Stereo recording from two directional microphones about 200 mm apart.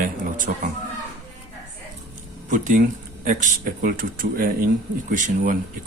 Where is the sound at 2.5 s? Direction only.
40° right (ahead or behind).